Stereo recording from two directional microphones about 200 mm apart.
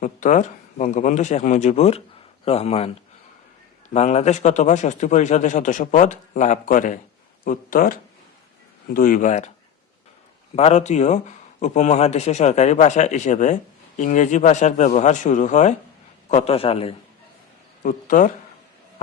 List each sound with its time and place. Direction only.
0.0 s speech: 40° left (ahead or behind)
3.9 s speech: 35° left (ahead or behind)
10.5 s a man's voice: 30° left (ahead or behind)
17.8 s speech: 40° left (ahead or behind)